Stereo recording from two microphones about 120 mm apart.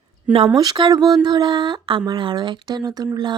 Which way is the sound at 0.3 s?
40° right (ahead or behind).